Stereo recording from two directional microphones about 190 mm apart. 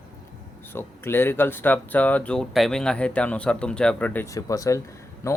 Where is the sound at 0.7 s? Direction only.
10° left (ahead or behind).